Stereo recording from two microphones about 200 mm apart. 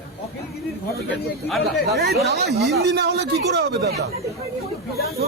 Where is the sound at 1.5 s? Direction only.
Centre (ahead or behind).